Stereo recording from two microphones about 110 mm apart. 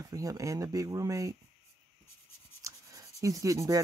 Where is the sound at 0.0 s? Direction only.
35° right (ahead or behind).